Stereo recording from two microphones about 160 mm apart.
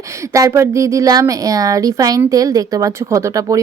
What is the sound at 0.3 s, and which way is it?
Speech, 20° right (ahead or behind).